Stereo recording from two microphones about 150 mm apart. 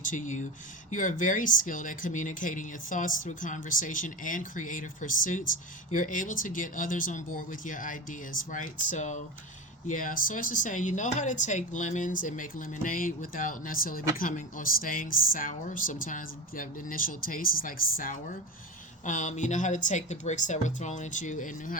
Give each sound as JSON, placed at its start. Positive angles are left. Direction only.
{"t": 0.0, "sound": "speech", "side_deg": 60}